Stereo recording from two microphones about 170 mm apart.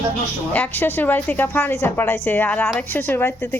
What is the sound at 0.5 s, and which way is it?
A woman's voice, 10° left (ahead or behind).